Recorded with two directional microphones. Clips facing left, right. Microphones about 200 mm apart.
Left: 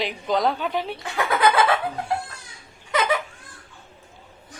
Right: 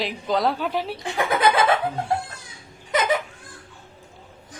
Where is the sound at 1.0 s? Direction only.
20° right (ahead or behind).